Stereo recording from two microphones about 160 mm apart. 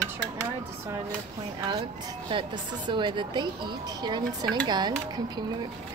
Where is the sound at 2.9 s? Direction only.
30° right (ahead or behind).